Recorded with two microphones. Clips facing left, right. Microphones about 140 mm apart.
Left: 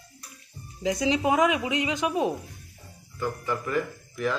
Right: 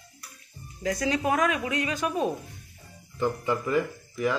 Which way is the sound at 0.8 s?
20° left (ahead or behind).